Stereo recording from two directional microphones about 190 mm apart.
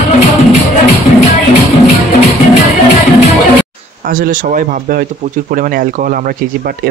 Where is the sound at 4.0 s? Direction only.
45° right (ahead or behind).